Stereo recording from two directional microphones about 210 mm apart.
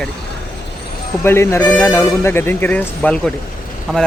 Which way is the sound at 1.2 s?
10° left (ahead or behind).